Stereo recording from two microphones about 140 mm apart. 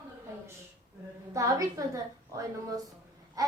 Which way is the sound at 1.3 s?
25° right (ahead or behind).